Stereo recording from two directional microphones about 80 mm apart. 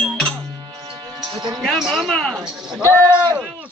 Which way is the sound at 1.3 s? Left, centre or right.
Right.